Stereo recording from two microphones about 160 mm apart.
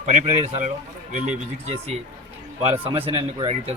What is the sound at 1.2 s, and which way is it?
A man's voice, 45° right (ahead or behind).